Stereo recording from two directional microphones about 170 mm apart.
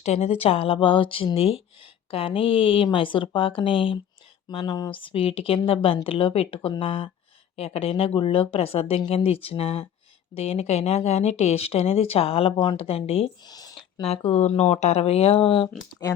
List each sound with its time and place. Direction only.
0.0 s speech: 40° left (ahead or behind)
13.5 s a sound: 25° left (ahead or behind)
14.0 s speech: 35° left (ahead or behind)